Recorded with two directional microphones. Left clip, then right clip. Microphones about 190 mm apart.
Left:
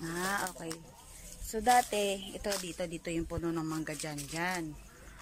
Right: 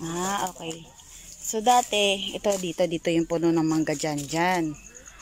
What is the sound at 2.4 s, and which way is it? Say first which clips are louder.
Speech: right 12 dB; 25° right (ahead or behind).